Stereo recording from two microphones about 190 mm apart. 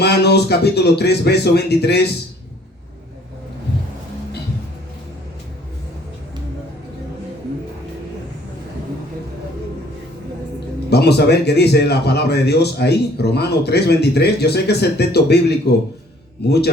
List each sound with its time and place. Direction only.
0.0 s speech: 60° left (ahead or behind)
10.8 s speech: 60° left (ahead or behind)